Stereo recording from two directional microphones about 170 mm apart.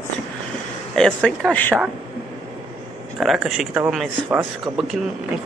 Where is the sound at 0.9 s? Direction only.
5° left (ahead or behind).